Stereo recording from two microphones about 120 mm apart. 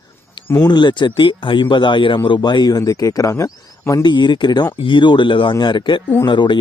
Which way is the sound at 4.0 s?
40° left (ahead or behind).